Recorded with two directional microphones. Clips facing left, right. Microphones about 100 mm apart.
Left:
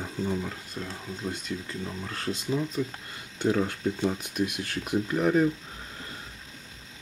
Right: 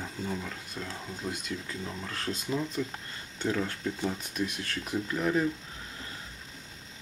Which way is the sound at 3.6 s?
20° left (ahead or behind).